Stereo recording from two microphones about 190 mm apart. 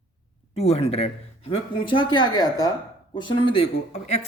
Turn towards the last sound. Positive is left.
turn(degrees=35)  # may be behind; listen again after turning